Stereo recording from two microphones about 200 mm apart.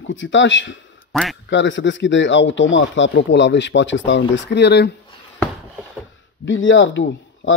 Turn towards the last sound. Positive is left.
turn(degrees=70)  # may be behind; listen again after turning